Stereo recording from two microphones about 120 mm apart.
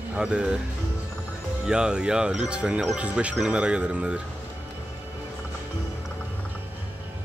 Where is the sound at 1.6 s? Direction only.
5° right (ahead or behind).